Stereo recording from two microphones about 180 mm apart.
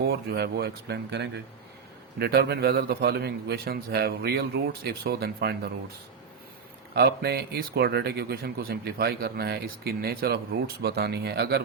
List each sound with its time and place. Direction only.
0.0 s speech: 60° right (ahead or behind)
6.9 s speech: 60° right (ahead or behind)